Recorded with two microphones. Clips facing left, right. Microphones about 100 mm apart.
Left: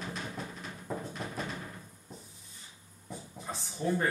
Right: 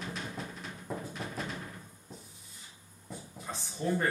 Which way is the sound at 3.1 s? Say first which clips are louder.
Left 1 dB; centre (ahead or behind).